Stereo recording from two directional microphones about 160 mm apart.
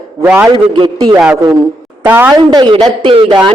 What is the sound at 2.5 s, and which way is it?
Speech, 30° right (ahead or behind).